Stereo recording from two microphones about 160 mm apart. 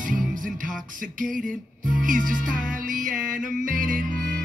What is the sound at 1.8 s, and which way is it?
Music, 55° right (ahead or behind).